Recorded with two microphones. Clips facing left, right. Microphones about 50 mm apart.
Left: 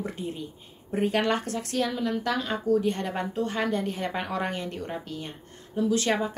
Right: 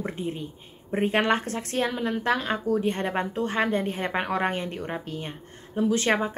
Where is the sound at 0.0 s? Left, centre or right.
Right.